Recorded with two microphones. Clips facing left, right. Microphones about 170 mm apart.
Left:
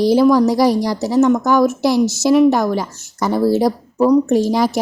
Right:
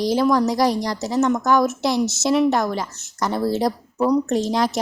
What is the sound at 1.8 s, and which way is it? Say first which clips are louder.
Speech: left 6 dB; 25° right (ahead or behind).